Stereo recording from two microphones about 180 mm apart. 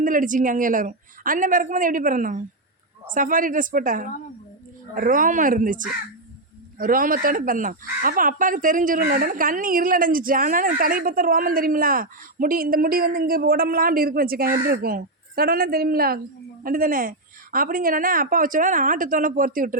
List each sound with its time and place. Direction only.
0.0 s speech: 50° right (ahead or behind)